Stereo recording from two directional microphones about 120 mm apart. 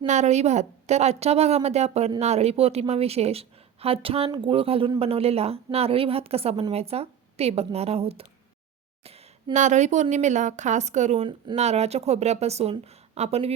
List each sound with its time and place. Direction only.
0.0 s a woman's voice: 75° right (ahead or behind); by 8.3 s 55° right (ahead or behind)
9.0 s a woman's voice: 65° right (ahead or behind)